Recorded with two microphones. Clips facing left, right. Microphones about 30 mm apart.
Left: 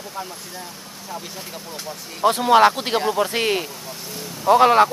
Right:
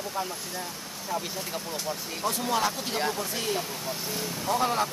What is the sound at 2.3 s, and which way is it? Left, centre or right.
Speech, left.